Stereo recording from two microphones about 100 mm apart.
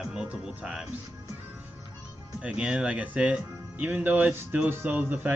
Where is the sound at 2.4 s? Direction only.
10° right (ahead or behind).